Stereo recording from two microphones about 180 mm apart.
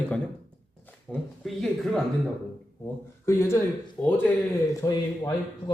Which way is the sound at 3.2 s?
15° left (ahead or behind).